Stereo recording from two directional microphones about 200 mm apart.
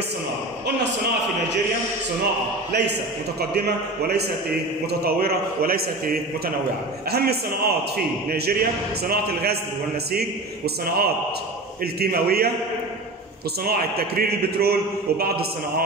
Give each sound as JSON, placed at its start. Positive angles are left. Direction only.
{"t": 2.7, "sound": "a man's voice", "side_deg": -55}
{"t": 13.7, "sound": "a man's voice", "side_deg": -50}